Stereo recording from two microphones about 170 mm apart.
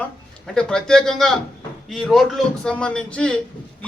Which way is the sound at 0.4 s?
5° left (ahead or behind).